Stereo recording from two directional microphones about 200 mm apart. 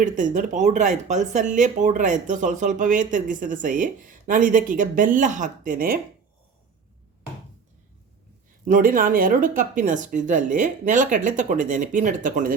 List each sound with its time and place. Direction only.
0.0 s speech: 40° right (ahead or behind)
8.6 s speech: 45° right (ahead or behind)